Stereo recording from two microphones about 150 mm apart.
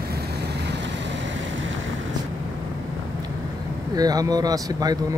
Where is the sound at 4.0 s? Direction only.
25° right (ahead or behind).